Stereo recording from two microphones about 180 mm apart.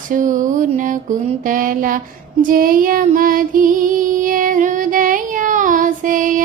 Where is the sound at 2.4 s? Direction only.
50° right (ahead or behind).